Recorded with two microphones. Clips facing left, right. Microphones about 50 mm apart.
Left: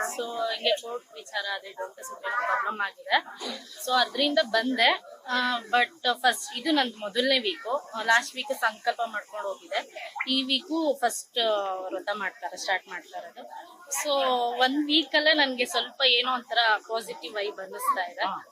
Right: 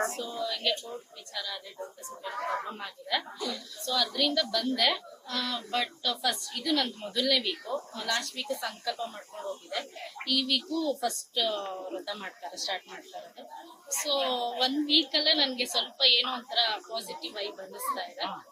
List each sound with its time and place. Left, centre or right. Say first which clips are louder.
0.0 s a sound: left 2 dB; centre
1.3 s a woman's voice: left 7 dB; left
3.4 s a woman's voice: left 1 dB; centre
3.9 s a woman's voice: left 5 dB; left
13.9 s a woman's voice: left 5 dB; left